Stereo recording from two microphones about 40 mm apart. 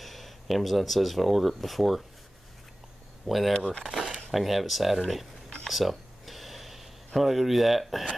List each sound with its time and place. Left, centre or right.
0.0 s speech: centre
3.3 s speech: centre
3.5 s speech: left
3.8 s speech: centre
5.7 s a sound: centre
7.2 s speech: centre